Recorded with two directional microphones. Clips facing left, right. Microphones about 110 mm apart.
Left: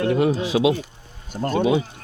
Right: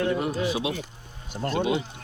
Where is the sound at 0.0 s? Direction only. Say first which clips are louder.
Left 5 dB; 80° left.